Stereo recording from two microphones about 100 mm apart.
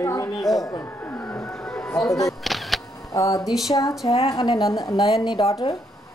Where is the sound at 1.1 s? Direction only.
20° left (ahead or behind).